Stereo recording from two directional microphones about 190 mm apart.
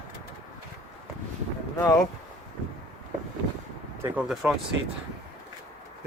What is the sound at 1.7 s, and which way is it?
Speech, 20° left (ahead or behind).